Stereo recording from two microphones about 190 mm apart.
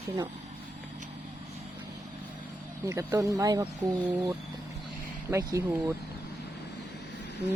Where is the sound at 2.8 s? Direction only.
15° right (ahead or behind).